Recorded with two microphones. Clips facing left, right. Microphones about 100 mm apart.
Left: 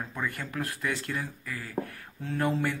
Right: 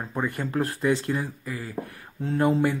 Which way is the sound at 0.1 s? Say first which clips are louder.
Right 11 dB; 25° right (ahead or behind).